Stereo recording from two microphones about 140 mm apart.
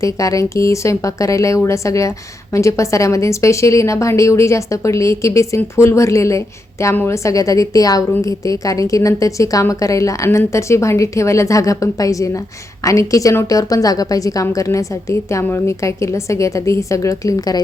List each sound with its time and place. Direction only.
0.0 s speech: 25° left (ahead or behind)